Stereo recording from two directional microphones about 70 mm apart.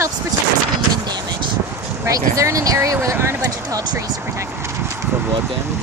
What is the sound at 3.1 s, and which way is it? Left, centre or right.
Speech, right.